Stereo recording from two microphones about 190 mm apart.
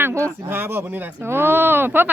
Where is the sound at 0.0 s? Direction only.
15° right (ahead or behind).